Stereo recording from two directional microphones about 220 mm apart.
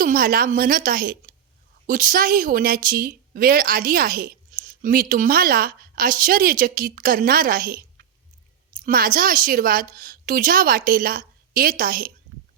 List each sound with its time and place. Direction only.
0.0 s a woman's voice: 40° right (ahead or behind)